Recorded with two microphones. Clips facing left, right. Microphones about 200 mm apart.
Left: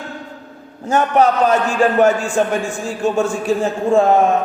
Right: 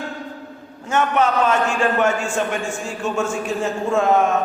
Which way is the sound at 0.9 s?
35° left (ahead or behind).